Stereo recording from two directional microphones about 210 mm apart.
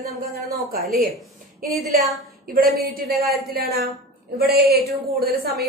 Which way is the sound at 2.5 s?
45° right (ahead or behind).